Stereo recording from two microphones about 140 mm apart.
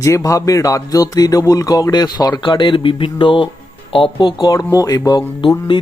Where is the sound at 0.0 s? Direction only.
20° left (ahead or behind).